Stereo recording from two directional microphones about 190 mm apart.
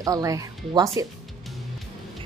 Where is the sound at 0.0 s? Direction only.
20° right (ahead or behind).